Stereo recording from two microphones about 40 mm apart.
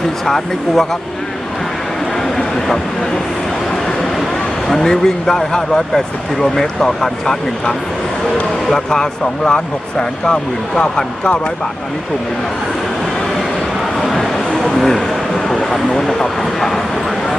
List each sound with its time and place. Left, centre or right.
0.3 s speech: centre
2.1 s vehicle: centre
4.7 s speech: centre
8.7 s speech: centre
14.2 s a sound: centre
15.7 s speech: centre